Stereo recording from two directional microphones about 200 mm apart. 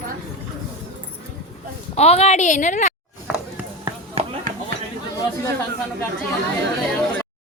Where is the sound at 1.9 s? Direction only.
30° left (ahead or behind).